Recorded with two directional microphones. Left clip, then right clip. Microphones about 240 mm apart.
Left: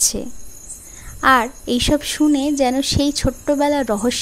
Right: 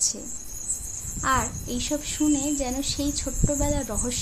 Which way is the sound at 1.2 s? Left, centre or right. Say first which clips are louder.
Left 11 dB; left.